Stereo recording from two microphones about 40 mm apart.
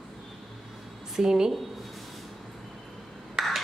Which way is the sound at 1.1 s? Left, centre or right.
Centre.